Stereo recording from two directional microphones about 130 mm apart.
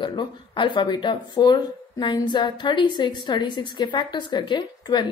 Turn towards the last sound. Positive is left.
turn(degrees=35)  # may be behind; listen again after turning